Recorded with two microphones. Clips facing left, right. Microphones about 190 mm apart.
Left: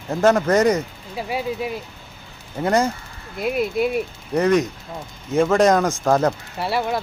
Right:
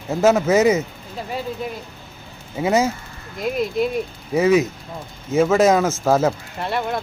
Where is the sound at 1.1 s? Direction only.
10° left (ahead or behind).